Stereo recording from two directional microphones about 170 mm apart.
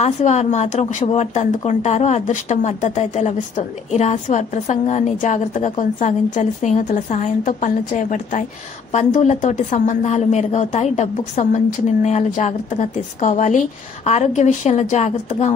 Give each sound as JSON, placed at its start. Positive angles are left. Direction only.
{"t": 0.0, "sound": "speech", "side_deg": 40}